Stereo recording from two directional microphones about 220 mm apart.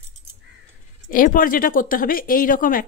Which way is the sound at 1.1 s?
40° left (ahead or behind).